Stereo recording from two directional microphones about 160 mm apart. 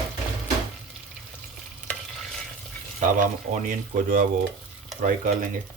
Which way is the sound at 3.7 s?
60° right (ahead or behind).